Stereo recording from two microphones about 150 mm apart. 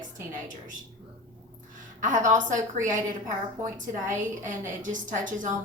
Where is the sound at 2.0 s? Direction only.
55° right (ahead or behind).